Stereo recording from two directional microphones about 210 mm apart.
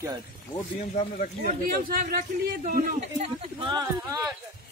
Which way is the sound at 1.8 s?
40° right (ahead or behind).